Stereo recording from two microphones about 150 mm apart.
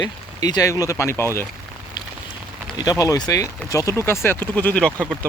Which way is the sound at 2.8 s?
25° left (ahead or behind).